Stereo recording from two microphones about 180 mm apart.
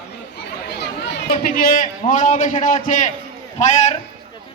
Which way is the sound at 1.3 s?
50° left (ahead or behind).